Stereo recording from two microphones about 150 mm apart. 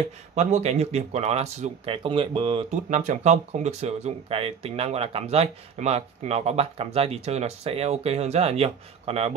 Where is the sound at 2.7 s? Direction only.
55° right (ahead or behind).